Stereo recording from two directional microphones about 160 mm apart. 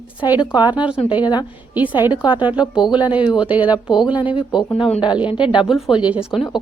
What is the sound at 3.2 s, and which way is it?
Speech, 5° right (ahead or behind).